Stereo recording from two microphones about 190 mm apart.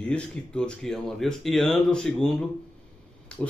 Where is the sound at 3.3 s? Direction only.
5° left (ahead or behind).